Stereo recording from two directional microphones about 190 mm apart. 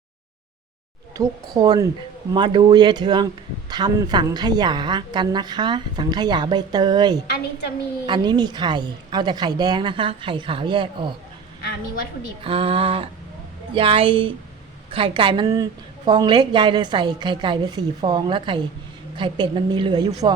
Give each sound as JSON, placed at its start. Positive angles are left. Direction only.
{"t": 1.1, "sound": "a woman's voice", "side_deg": -20}
{"t": 12.4, "sound": "a woman's voice", "side_deg": -30}